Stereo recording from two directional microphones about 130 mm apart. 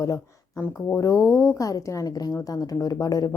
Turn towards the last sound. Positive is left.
turn(degrees=30)  # may be behind; listen again after turning